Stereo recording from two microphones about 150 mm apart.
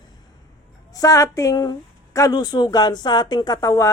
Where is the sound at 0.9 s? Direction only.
20° left (ahead or behind).